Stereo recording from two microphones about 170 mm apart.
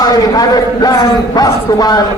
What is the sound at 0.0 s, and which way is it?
A man's voice, 20° left (ahead or behind).